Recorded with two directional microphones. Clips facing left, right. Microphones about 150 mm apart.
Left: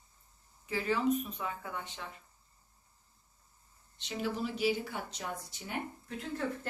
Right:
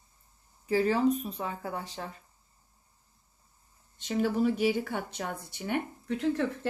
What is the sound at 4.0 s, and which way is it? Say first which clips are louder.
Speech: right 8 dB; 50° right (ahead or behind).